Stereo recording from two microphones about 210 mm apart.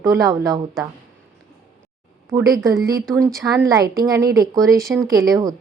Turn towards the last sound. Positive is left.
turn(degrees=-15)  # may be behind; listen again after turning